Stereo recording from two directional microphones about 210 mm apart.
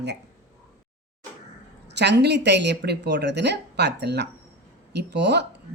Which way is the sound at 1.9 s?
55° right (ahead or behind).